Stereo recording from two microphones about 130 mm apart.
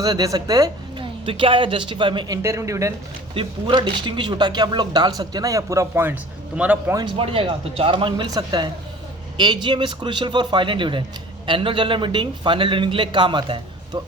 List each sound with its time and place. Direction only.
0.0 s speech: 30° right (ahead or behind)
3.3 s a man's voice: 35° right (ahead or behind); by 6.9 s 10° right (ahead or behind)
6.9 s speech: 35° right (ahead or behind)